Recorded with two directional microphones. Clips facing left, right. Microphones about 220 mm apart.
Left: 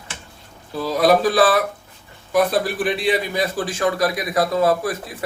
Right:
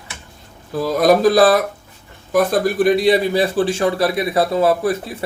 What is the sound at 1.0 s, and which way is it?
A man's voice, 45° right (ahead or behind).